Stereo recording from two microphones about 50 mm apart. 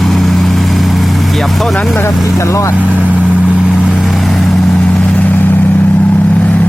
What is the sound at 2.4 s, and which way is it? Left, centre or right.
Speech, left.